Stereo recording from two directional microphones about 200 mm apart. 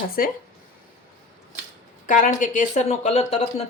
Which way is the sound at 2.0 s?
40° left (ahead or behind).